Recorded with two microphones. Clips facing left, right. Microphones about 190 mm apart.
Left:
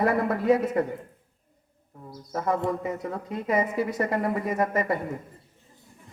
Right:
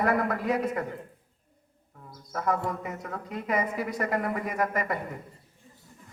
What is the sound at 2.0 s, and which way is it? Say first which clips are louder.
Speech: left 3 dB; 30° left (ahead or behind).